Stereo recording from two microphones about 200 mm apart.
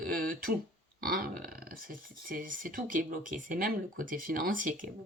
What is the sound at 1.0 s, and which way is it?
Speech, 45° right (ahead or behind).